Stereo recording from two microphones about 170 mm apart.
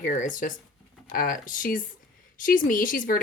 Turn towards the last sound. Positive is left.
turn(degrees=50)  # may be behind; listen again after turning